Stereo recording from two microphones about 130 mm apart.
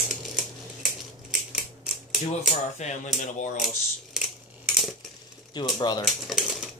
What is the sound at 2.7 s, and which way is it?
Speech, 70° left (ahead or behind).